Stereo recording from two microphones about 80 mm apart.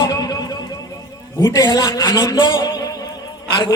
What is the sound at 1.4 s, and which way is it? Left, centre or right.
A man's voice, left.